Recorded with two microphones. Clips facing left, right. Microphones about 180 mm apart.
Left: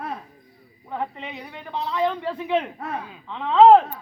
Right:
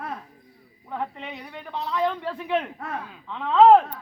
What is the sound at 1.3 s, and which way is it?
Speech, 5° left (ahead or behind).